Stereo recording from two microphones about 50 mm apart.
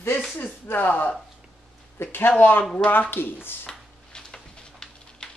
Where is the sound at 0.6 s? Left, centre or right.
Left.